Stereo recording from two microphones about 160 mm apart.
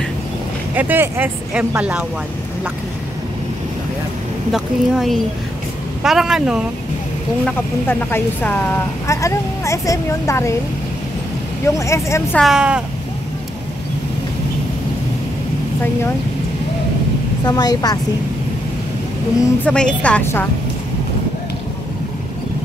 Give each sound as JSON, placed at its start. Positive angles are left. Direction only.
{"t": 0.7, "sound": "speech", "side_deg": -10}
{"t": 4.5, "sound": "speech", "side_deg": 0}
{"t": 8.0, "sound": "a woman's voice", "side_deg": 10}
{"t": 11.6, "sound": "a woman's voice", "side_deg": 20}
{"t": 12.4, "sound": "speech", "side_deg": -5}
{"t": 17.5, "sound": "speech", "side_deg": 25}
{"t": 19.6, "sound": "a woman's voice", "side_deg": 5}